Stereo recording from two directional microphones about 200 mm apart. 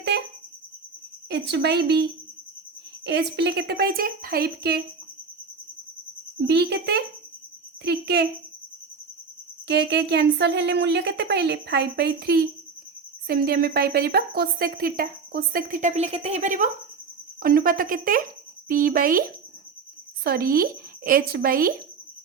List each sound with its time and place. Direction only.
0.1 s music: 55° right (ahead or behind)
1.3 s speech: 60° right (ahead or behind)
3.1 s speech: 55° right (ahead or behind)
6.5 s speech: 55° right (ahead or behind)
9.6 s speech: 55° right (ahead or behind); by 16.6 s 35° right (ahead or behind)
17.4 s speech: 45° right (ahead or behind)
20.2 s speech: 50° right (ahead or behind)